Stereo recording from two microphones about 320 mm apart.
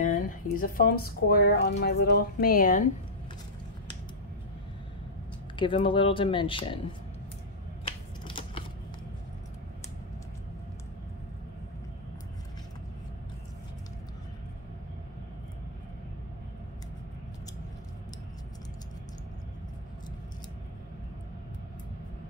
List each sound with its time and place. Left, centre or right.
0.0 s speech: left
5.6 s speech: centre
8.3 s creak: centre